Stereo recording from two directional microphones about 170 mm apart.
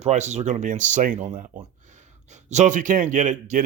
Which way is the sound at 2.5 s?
45° right (ahead or behind).